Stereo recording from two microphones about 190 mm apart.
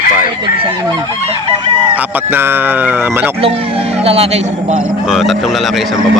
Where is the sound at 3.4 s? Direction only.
30° right (ahead or behind).